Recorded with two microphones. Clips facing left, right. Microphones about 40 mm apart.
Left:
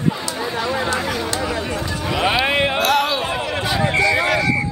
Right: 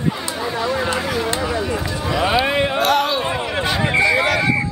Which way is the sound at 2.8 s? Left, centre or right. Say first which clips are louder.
Right 1 dB; centre.